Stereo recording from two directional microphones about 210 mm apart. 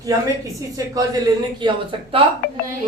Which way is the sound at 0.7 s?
15° right (ahead or behind).